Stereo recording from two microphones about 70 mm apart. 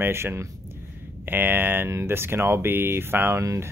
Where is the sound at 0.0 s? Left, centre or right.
Right.